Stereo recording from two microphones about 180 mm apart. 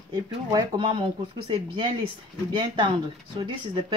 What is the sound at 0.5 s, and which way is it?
Speech, 30° right (ahead or behind).